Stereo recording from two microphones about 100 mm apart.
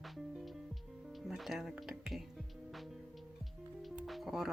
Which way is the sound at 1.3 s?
5° right (ahead or behind).